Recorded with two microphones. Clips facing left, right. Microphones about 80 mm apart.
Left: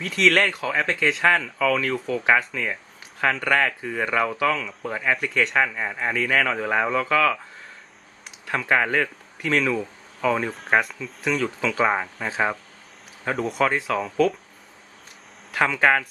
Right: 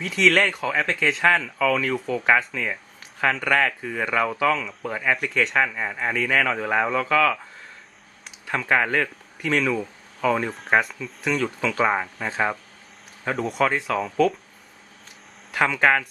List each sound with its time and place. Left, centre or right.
0.0 s speech: centre
8.4 s speech: centre
15.5 s speech: centre